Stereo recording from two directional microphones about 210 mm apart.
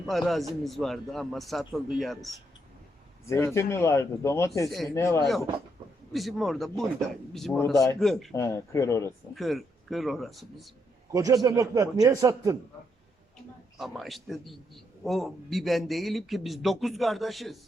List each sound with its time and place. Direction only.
0.1 s a man's voice: centre (ahead or behind)
3.2 s speech: 15° left (ahead or behind)
5.2 s a man's voice: centre (ahead or behind)
8.4 s speech: 15° left (ahead or behind)
9.3 s a man's voice: centre (ahead or behind)
11.1 s a man's voice: 15° right (ahead or behind)
13.7 s a man's voice: centre (ahead or behind)